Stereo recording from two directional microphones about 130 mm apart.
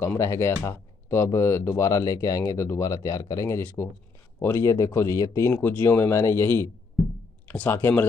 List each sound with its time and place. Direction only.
0.0 s speech: 20° left (ahead or behind)